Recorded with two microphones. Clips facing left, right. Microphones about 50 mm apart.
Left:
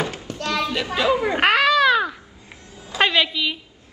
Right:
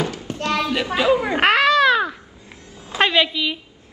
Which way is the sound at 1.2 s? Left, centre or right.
Centre.